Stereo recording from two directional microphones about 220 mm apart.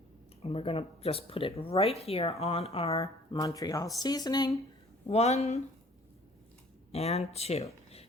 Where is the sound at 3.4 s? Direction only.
15° left (ahead or behind).